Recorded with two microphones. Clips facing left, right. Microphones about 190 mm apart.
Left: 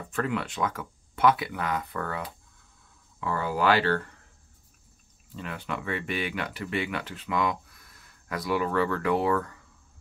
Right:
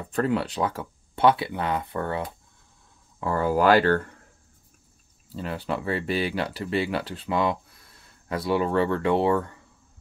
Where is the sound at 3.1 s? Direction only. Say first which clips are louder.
Right 6 dB; 40° right (ahead or behind).